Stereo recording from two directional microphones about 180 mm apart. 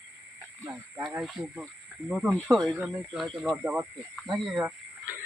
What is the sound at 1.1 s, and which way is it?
Speech, centre (ahead or behind).